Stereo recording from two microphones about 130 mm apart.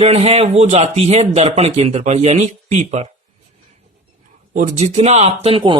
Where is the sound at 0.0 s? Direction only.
50° right (ahead or behind).